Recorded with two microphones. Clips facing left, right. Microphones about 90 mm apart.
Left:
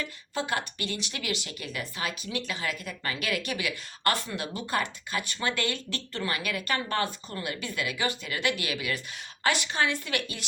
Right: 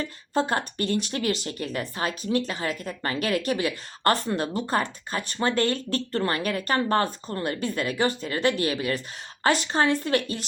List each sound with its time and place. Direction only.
0.0 s speech: 40° right (ahead or behind)